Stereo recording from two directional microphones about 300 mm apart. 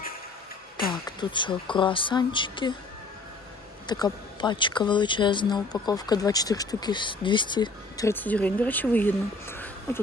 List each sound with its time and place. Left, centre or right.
0.9 s speech: centre
3.8 s speech: centre